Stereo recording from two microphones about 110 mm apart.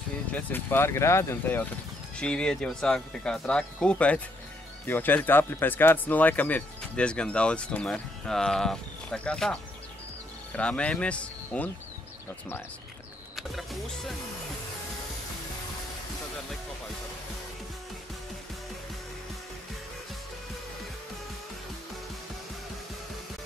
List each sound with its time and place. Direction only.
0.3 s speech: 20° left (ahead or behind)
2.1 s speech: 10° left (ahead or behind)
13.4 s speech: centre (ahead or behind)